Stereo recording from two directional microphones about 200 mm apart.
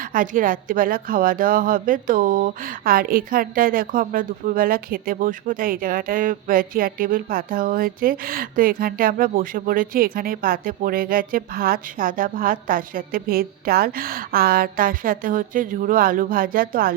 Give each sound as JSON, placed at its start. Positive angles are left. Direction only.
{"t": 0.0, "sound": "speech", "side_deg": -45}